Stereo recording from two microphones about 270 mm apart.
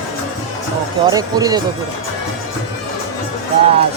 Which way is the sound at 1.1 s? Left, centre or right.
Centre.